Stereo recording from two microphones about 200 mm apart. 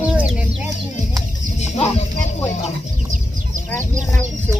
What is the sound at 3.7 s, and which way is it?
Chicken, 10° left (ahead or behind).